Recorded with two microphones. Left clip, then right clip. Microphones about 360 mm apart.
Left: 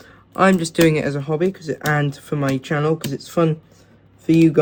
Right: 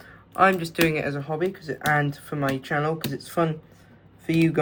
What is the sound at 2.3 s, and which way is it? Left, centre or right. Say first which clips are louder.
Speech: left 5 dB; left.